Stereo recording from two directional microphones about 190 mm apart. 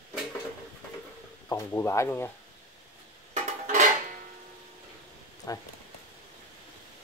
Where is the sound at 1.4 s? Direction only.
15° left (ahead or behind).